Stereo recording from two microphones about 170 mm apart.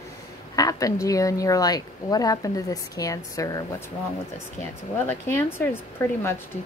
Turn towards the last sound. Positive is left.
turn(degrees=15)  # may be behind; listen again after turning